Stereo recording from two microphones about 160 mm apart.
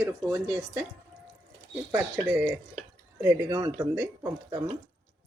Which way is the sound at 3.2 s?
20° right (ahead or behind).